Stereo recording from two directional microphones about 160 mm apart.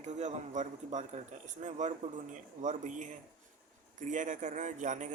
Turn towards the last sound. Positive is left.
turn(degrees=-50)  # may be behind; listen again after turning